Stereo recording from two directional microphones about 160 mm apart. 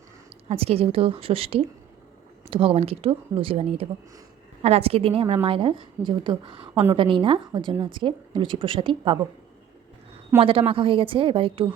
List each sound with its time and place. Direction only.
0.4 s speech: 40° right (ahead or behind)
10.4 s speech: 35° right (ahead or behind)